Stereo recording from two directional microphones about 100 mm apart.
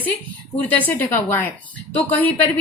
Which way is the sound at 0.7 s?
20° left (ahead or behind).